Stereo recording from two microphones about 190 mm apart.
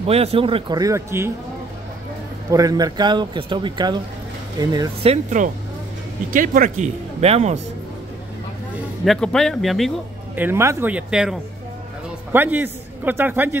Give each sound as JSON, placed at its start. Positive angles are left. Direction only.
{"t": 0.0, "sound": "speech", "side_deg": -30}
{"t": 2.5, "sound": "speech", "side_deg": -20}
{"t": 5.1, "sound": "speech", "side_deg": -40}
{"t": 7.2, "sound": "speech", "side_deg": -35}
{"t": 9.0, "sound": "speech", "side_deg": 0}
{"t": 10.3, "sound": "a man's voice", "side_deg": -10}